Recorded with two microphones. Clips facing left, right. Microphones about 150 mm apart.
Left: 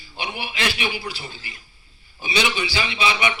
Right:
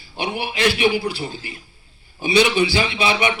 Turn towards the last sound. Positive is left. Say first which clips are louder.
# right 3 dB
turn(degrees=-50)  # may be behind; listen again after turning